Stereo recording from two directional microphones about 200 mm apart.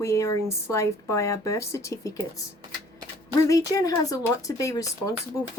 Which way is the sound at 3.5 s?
15° left (ahead or behind).